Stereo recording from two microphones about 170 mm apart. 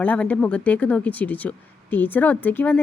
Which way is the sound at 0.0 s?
10° left (ahead or behind).